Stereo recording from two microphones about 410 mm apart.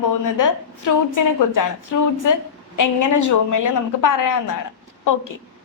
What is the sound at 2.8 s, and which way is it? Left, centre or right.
A woman's voice, left.